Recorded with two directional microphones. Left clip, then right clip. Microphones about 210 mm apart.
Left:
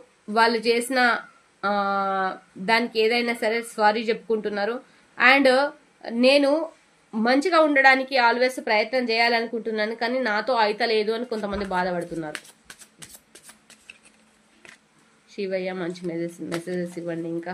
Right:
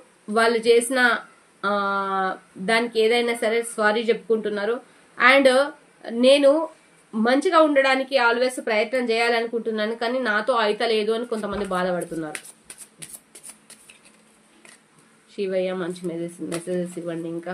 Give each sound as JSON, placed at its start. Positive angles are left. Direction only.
{"t": 0.3, "sound": "speech", "side_deg": 35}
{"t": 15.3, "sound": "speech", "side_deg": 35}